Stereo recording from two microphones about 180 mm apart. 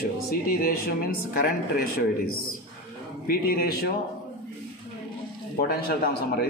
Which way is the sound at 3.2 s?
55° left (ahead or behind).